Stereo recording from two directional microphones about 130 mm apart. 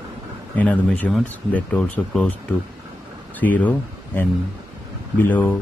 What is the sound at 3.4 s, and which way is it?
Speech, 10° left (ahead or behind).